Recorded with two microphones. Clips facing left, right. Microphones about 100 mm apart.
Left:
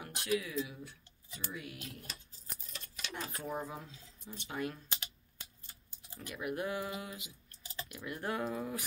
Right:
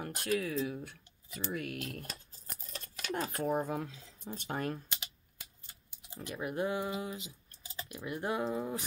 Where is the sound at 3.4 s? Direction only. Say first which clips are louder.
Right 8 dB; 50° right (ahead or behind).